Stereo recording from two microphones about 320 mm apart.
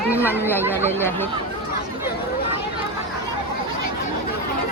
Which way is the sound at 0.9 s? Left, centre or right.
Centre.